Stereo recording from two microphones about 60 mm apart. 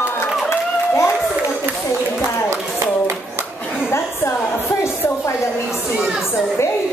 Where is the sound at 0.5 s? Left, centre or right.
Left.